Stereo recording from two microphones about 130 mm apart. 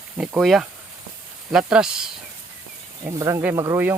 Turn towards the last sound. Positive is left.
turn(degrees=-20)  # may be behind; listen again after turning